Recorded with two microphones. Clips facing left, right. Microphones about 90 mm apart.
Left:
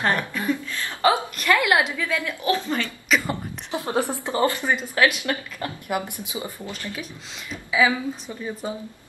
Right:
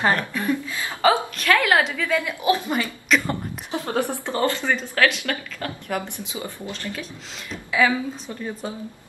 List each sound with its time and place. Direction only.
0.0 s a woman's voice: 5° right (ahead or behind)
0.7 s a sound: 10° right (ahead or behind)
1.0 s a sound: 5° left (ahead or behind)
1.6 s a woman's voice: 5° left (ahead or behind)
2.2 s speech: 15° right (ahead or behind)
3.3 s a woman's voice: 15° left (ahead or behind)